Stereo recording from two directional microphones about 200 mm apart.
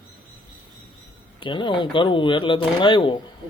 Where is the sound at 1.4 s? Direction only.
25° left (ahead or behind).